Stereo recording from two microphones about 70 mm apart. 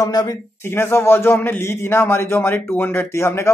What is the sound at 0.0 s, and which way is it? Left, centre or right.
Speech, left.